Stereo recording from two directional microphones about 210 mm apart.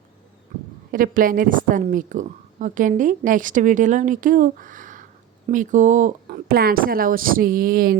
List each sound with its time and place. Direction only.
0.9 s a woman's voice: 40° right (ahead or behind)